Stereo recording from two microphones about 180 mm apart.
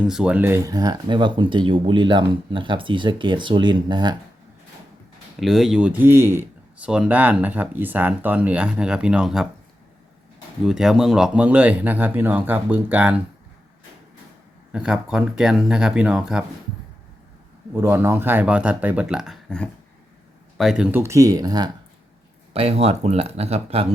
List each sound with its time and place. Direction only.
0.0 s speech: 5° right (ahead or behind); by 4.2 s 25° right (ahead or behind)
5.4 s speech: centre (ahead or behind)
10.7 s speech: centre (ahead or behind)
14.7 s speech: 5° right (ahead or behind)
17.7 s speech: 15° right (ahead or behind)
22.5 s speech: 35° right (ahead or behind)